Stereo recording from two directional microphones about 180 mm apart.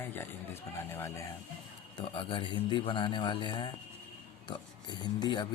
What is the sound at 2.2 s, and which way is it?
Speech, 25° left (ahead or behind).